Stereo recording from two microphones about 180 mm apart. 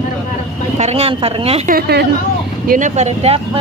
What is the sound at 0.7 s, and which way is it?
Speech, 35° right (ahead or behind).